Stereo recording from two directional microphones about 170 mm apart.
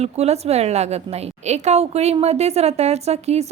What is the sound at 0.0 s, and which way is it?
A woman's voice, 40° right (ahead or behind).